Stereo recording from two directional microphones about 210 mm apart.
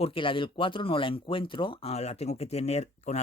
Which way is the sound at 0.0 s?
25° left (ahead or behind).